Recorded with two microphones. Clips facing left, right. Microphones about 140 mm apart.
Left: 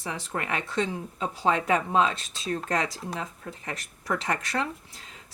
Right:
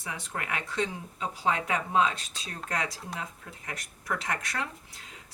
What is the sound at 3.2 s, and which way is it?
A woman's voice, 30° left (ahead or behind).